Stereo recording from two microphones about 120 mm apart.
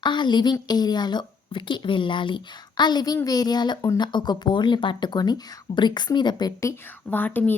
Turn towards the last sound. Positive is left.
turn(degrees=15)  # may be behind; listen again after turning